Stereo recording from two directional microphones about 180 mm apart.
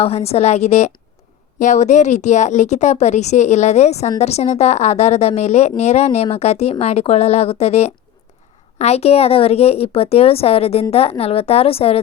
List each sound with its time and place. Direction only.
0.0 s a woman's voice: 35° left (ahead or behind)